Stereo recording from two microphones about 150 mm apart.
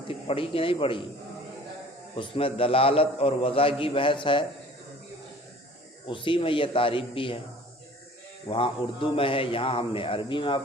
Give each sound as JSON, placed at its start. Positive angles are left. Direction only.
{"t": 0.1, "sound": "a man's voice", "side_deg": 40}
{"t": 2.1, "sound": "a man's voice", "side_deg": 35}
{"t": 6.1, "sound": "a man's voice", "side_deg": 35}
{"t": 8.4, "sound": "a man's voice", "side_deg": 35}